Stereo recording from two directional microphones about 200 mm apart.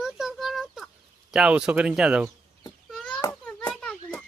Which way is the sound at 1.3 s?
5° right (ahead or behind).